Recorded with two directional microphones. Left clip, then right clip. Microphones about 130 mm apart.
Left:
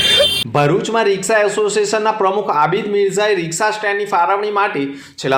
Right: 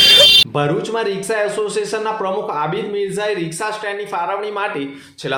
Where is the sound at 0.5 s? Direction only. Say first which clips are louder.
Left 4 dB; 30° left (ahead or behind).